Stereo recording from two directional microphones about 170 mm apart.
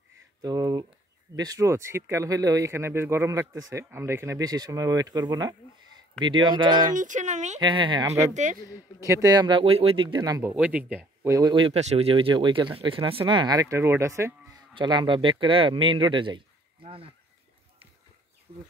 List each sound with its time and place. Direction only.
0.4 s speech: 25° right (ahead or behind)
7.0 s speech: 45° right (ahead or behind)
7.6 s speech: 25° right (ahead or behind)
10.4 s speech: 5° right (ahead or behind)
14.8 s speech: 25° right (ahead or behind)